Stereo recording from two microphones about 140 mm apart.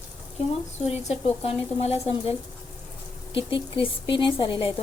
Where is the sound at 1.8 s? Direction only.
50° left (ahead or behind).